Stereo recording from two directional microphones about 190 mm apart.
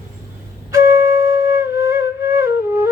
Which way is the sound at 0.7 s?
15° right (ahead or behind).